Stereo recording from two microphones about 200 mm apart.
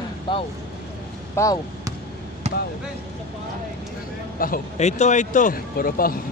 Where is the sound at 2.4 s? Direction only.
35° right (ahead or behind).